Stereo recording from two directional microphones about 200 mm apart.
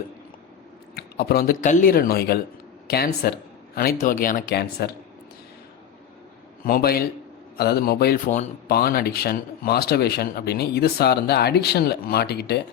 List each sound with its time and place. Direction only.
0.9 s speech: 50° left (ahead or behind)
6.7 s speech: 50° left (ahead or behind)
8.3 s speech: 35° left (ahead or behind)
8.7 s speech: 50° left (ahead or behind)